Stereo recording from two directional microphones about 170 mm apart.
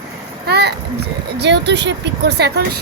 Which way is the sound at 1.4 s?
90° right.